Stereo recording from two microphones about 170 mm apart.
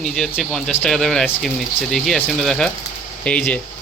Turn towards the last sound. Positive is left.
turn(degrees=5)  # may be behind; listen again after turning